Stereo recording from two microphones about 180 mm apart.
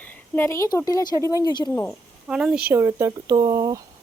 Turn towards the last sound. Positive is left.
turn(degrees=-20)  # may be behind; listen again after turning